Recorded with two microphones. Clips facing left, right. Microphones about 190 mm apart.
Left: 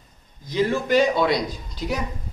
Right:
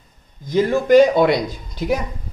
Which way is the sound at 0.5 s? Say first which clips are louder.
Right 7 dB; 45° right (ahead or behind).